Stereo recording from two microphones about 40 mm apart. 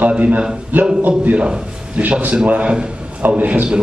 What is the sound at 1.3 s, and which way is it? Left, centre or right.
Speech, right.